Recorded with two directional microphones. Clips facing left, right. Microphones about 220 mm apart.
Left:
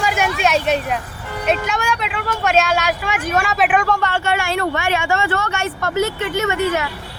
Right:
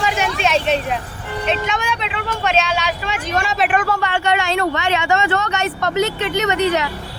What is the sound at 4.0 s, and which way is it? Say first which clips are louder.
Speech: right 1 dB; 15° right (ahead or behind).